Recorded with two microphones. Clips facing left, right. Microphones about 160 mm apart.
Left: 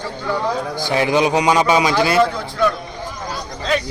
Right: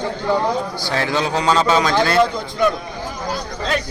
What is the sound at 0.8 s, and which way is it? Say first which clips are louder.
A man's voice: left 8 dB; 15° left (ahead or behind).